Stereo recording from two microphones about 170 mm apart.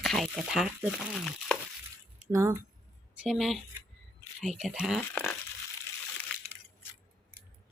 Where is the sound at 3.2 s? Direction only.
Centre (ahead or behind).